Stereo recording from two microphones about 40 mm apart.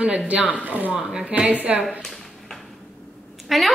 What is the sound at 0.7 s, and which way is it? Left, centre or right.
A woman's voice, right.